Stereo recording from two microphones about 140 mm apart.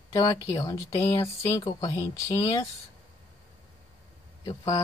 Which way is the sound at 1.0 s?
45° left (ahead or behind).